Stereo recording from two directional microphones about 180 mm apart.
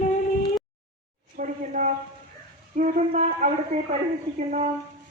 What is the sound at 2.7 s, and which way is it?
Speech, 45° right (ahead or behind).